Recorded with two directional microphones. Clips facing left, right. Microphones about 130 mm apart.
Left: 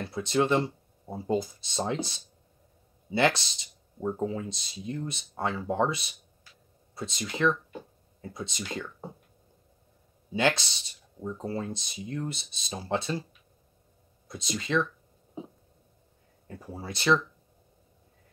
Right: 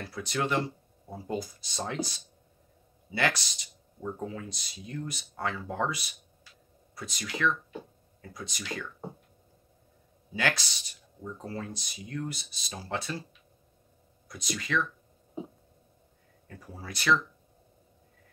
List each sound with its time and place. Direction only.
0.0 s speech: 25° left (ahead or behind)
10.3 s speech: 25° left (ahead or behind)
14.2 s speech: 25° left (ahead or behind)
16.4 s speech: 25° left (ahead or behind)